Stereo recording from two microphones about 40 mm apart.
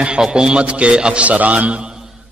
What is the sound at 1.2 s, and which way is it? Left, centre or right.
Speech, right.